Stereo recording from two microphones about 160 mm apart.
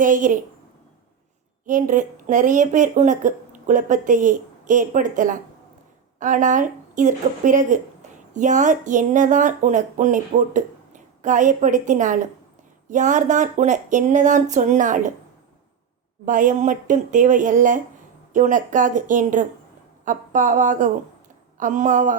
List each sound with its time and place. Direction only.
0.0 s a woman's voice: 55° right (ahead or behind)
1.6 s speech: 55° right (ahead or behind)
16.2 s speech: 55° right (ahead or behind)